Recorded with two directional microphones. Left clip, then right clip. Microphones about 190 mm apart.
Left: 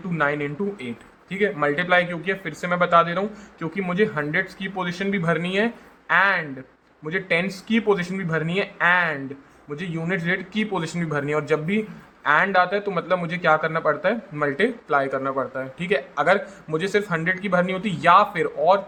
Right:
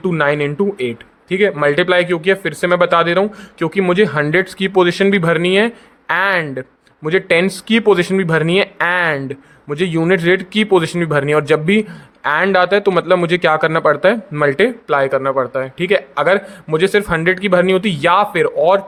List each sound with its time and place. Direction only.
0.1 s a man's voice: 55° right (ahead or behind)